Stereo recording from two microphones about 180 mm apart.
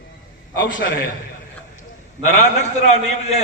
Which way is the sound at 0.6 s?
75° left (ahead or behind).